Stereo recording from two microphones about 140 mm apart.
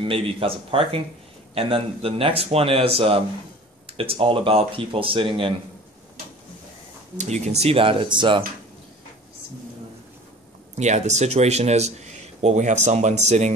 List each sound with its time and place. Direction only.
0.0 s speech: 40° right (ahead or behind)
7.2 s speech: 55° right (ahead or behind); by 8.5 s 35° right (ahead or behind)
10.8 s speech: 55° right (ahead or behind)